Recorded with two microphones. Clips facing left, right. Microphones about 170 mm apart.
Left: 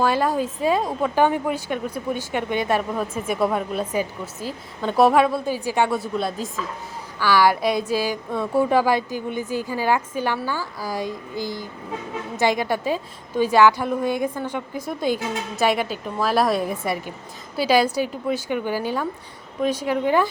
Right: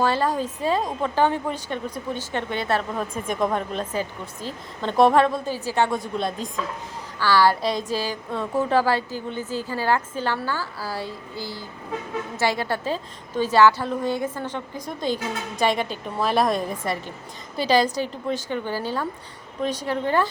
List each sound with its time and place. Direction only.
0.0 s a woman's voice: 10° left (ahead or behind)